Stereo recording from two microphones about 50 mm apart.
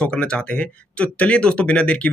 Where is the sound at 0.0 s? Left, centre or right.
Centre.